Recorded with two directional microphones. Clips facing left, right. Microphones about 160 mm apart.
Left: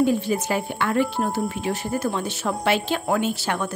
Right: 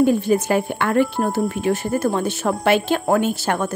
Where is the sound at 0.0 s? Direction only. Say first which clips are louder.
Right 4 dB; 50° right (ahead or behind).